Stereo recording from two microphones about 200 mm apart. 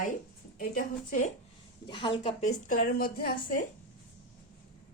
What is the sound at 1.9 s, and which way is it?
Speech, 25° left (ahead or behind).